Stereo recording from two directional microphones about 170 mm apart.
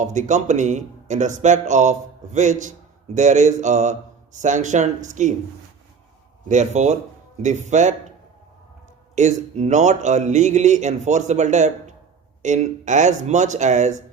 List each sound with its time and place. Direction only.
0.0 s speech: 45° right (ahead or behind)
6.5 s speech: 45° right (ahead or behind)
9.1 s speech: 45° right (ahead or behind)